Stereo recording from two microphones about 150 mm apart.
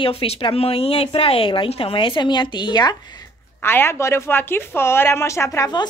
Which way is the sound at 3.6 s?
15° left (ahead or behind).